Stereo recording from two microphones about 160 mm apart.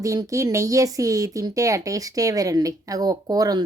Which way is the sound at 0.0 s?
20° right (ahead or behind).